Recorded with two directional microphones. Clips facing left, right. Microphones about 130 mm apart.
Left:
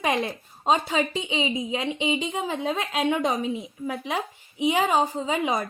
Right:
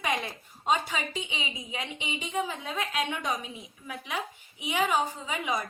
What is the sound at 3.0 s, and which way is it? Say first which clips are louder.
Speech: left 8 dB; 45° left (ahead or behind).